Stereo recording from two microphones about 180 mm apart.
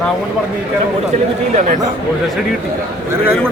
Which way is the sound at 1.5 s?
45° right (ahead or behind).